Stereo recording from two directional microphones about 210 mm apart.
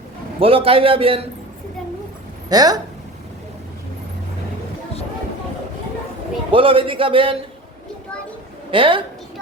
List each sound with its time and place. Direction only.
0.3 s speech: 25° right (ahead or behind)
2.5 s speech: 20° right (ahead or behind)
6.5 s speech: 25° right (ahead or behind)
8.7 s speech: 25° right (ahead or behind)